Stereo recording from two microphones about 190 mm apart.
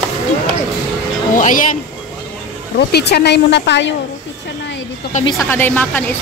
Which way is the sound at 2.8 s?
60° left (ahead or behind).